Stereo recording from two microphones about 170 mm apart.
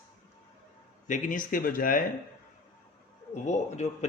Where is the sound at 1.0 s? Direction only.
50° left (ahead or behind).